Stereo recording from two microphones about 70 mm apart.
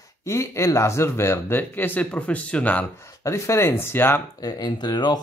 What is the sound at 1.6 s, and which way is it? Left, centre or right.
Speech, left.